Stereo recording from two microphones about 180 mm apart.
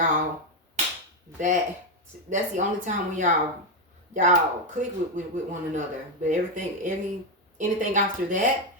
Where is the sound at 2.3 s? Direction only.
40° right (ahead or behind).